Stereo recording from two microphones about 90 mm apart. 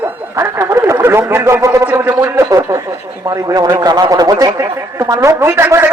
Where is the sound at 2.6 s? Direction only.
30° right (ahead or behind).